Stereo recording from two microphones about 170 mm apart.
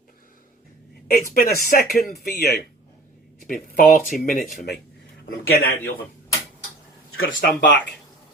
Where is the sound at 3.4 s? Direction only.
55° left (ahead or behind).